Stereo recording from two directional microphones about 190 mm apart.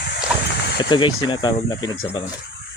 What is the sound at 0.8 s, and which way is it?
Speech, 25° left (ahead or behind).